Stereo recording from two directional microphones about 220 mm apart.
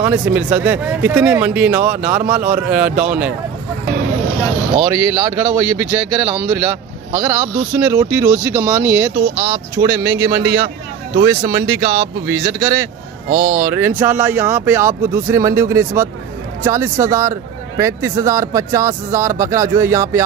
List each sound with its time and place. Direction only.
0.0 s speech: 5° right (ahead or behind)
4.8 s speech: 10° right (ahead or behind)
13.3 s speech: 50° right (ahead or behind)
13.6 s speech: 10° right (ahead or behind)